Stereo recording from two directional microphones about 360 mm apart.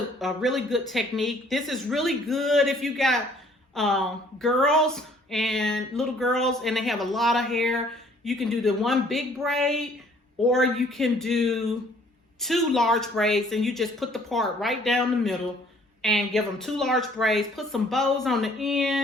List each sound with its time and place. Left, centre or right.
0.2 s speech: centre